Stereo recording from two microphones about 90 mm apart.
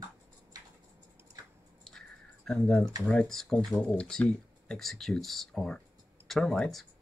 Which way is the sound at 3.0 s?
5° left (ahead or behind).